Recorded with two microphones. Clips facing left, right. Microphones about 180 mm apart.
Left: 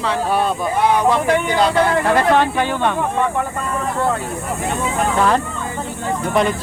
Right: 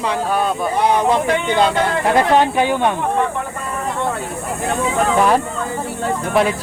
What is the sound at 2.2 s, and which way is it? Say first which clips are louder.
Speech: right 1 dB; 15° right (ahead or behind).